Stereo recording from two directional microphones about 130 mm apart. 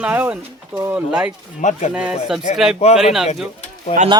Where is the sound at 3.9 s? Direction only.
40° left (ahead or behind).